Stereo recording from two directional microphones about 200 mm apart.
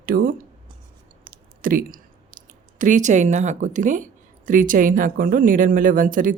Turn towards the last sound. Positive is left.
turn(degrees=-40)  # may be behind; listen again after turning